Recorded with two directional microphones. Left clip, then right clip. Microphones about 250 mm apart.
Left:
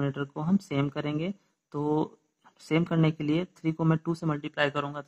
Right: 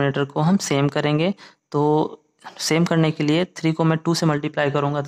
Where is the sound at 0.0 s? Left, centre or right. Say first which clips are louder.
Right 12 dB; right.